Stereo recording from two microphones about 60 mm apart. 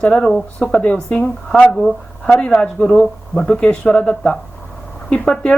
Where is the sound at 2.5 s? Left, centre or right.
Centre.